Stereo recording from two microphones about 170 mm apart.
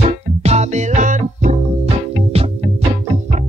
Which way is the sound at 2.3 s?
35° right (ahead or behind).